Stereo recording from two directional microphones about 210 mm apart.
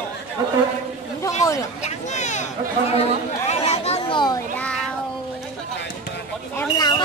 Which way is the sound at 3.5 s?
30° left (ahead or behind).